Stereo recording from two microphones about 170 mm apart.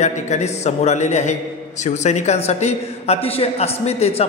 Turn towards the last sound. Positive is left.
turn(degrees=35)  # may be behind; listen again after turning